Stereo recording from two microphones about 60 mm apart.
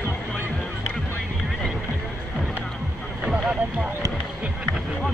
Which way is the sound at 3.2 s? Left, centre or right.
Centre.